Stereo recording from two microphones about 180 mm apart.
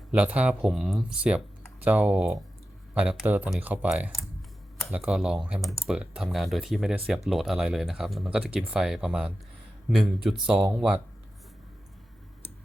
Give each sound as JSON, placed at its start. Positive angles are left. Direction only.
{"t": 0.1, "sound": "speech", "side_deg": -5}